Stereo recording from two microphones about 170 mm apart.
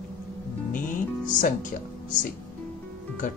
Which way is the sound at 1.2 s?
50° left (ahead or behind).